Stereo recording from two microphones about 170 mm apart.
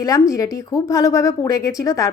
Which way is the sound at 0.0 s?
20° left (ahead or behind).